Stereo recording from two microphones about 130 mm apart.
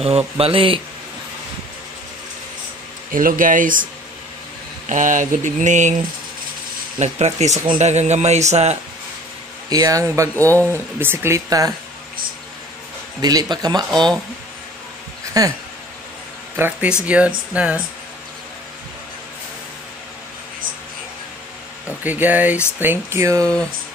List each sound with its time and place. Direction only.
0.4 s speech: 45° right (ahead or behind)
3.1 s speech: 90° right
4.8 s a sound: 75° right (ahead or behind)
7.0 s speech: 55° right (ahead or behind)
9.7 s speech: 30° right (ahead or behind)
10.5 s speech: 15° left (ahead or behind)
11.0 s speech: 20° right (ahead or behind)
13.2 s speech: 30° right (ahead or behind)
13.8 s speech: 5° left (ahead or behind)
15.3 s speech: 30° right (ahead or behind)
16.5 s speech: 15° right (ahead or behind)
22.0 s speech: 15° right (ahead or behind)
23.4 s speech: 5° left (ahead or behind)